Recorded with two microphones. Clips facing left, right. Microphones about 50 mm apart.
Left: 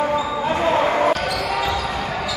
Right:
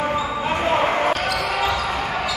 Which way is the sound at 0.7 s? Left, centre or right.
Right.